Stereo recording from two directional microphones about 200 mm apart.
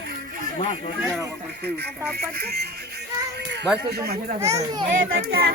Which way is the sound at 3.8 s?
50° right (ahead or behind).